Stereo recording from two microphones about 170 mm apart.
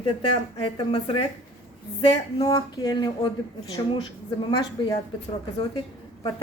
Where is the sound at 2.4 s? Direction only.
25° left (ahead or behind).